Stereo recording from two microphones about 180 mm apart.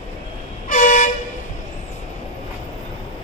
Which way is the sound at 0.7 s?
45° left (ahead or behind).